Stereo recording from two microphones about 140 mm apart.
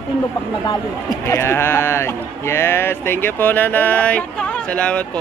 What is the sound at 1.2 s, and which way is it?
Speech, 20° left (ahead or behind).